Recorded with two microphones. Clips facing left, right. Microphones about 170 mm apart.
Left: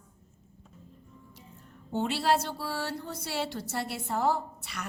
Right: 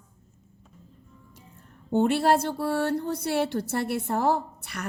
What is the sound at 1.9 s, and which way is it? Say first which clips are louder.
A woman's voice: right 6 dB; 55° right (ahead or behind).